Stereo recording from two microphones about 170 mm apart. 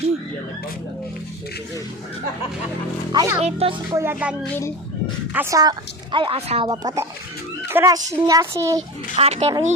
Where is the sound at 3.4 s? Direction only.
35° right (ahead or behind).